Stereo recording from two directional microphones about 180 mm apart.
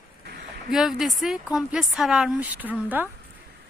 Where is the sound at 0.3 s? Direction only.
60° right (ahead or behind).